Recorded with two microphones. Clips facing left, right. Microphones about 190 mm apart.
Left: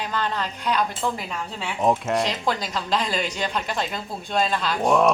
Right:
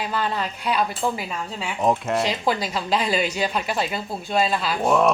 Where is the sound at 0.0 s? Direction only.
10° right (ahead or behind).